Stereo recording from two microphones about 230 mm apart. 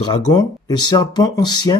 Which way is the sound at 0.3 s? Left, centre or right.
Centre.